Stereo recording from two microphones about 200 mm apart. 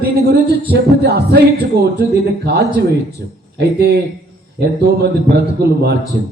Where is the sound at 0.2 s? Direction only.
55° right (ahead or behind).